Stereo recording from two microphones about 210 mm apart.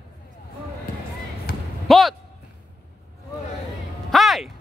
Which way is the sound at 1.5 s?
45° left (ahead or behind).